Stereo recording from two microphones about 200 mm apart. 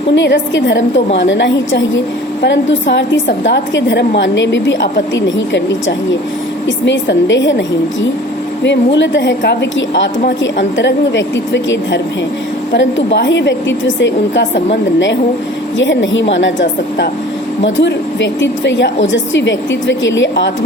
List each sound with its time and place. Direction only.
0.1 s a woman's voice: 60° left (ahead or behind)
6.7 s a woman's voice: 65° left (ahead or behind)
8.6 s a woman's voice: 60° left (ahead or behind)